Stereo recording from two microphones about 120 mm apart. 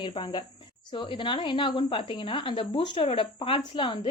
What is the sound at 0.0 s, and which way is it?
A woman's voice, 40° left (ahead or behind).